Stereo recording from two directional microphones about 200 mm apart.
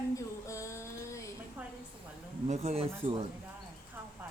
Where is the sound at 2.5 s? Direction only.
35° right (ahead or behind).